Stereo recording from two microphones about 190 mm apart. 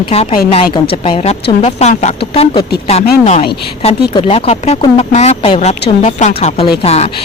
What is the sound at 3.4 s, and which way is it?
Speech, 30° left (ahead or behind).